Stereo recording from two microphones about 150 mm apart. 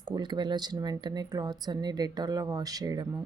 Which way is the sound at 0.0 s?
30° right (ahead or behind).